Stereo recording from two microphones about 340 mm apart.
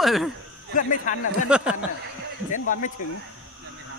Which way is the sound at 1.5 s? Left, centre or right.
Centre.